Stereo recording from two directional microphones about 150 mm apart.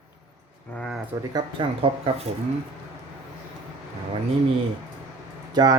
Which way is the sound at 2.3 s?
45° right (ahead or behind).